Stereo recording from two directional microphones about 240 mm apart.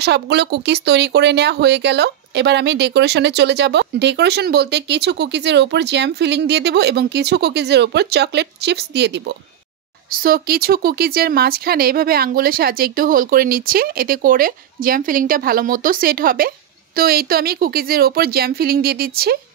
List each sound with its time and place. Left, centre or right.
0.0 s speech: right
10.1 s speech: right